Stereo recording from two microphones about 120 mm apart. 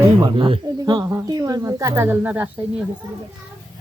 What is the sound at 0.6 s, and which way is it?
Speech, 35° right (ahead or behind).